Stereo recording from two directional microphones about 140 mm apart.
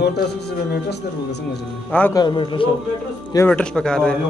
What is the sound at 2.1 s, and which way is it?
Speech, 35° left (ahead or behind).